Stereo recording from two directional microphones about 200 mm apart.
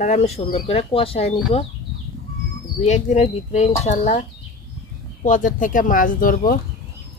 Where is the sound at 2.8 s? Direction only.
35° left (ahead or behind).